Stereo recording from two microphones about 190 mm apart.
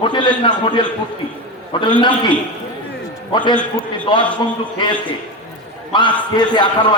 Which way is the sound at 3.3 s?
25° left (ahead or behind).